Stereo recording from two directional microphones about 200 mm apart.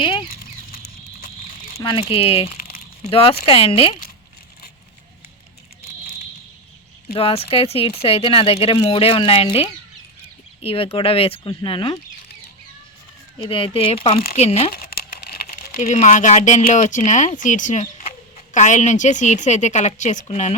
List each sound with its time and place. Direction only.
0.0 s a sound: 25° left (ahead or behind)
1.8 s speech: 25° left (ahead or behind)
7.1 s speech: 30° left (ahead or behind)
13.4 s speech: 25° left (ahead or behind)
14.7 s crumpling: 50° left (ahead or behind)
15.9 s speech: 35° left (ahead or behind)